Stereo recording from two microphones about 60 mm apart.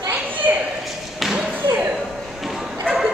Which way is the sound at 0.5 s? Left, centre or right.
Right.